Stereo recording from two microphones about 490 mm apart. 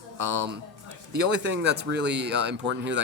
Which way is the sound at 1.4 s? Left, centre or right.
Right.